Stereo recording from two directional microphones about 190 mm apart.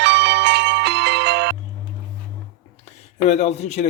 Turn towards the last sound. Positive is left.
turn(degrees=35)  # may be behind; listen again after turning